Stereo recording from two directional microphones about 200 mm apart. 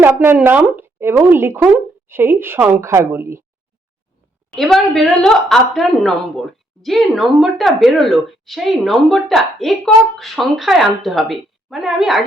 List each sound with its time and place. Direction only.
0.0 s speech: 10° right (ahead or behind)
4.5 s a woman's voice: centre (ahead or behind)